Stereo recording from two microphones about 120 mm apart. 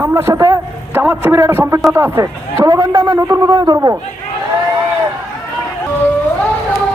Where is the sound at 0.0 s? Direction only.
20° right (ahead or behind).